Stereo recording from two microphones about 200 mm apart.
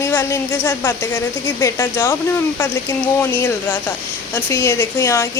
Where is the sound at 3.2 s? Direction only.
15° left (ahead or behind).